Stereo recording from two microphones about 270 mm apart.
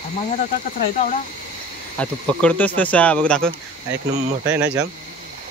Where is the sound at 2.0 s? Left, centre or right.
Centre.